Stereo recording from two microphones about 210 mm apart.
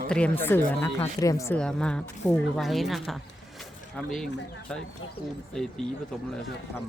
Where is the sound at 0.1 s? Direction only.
10° left (ahead or behind).